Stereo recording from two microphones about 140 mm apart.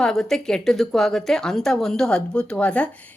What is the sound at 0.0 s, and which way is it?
A woman's voice, 5° left (ahead or behind).